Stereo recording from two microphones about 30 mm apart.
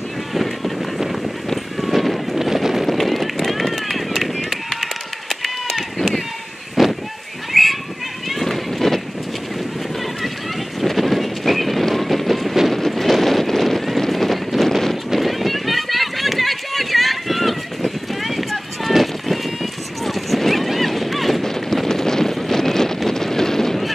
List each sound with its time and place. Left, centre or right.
0.3 s vehicle: centre
1.8 s run: centre
2.4 s wind noise: centre
2.9 s run: centre
5.9 s run: centre
6.7 s a sound: centre
10.8 s a sound: centre
11.9 s train: centre
12.7 s vehicle: centre
15.1 s run: centre
21.4 s clip-clop: centre
21.8 s wind noise: centre